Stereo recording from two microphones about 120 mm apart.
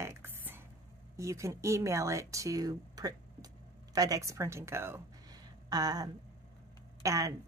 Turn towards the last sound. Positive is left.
turn(degrees=-30)  # may be behind; listen again after turning